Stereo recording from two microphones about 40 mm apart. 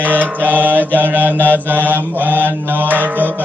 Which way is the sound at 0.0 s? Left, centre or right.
Right.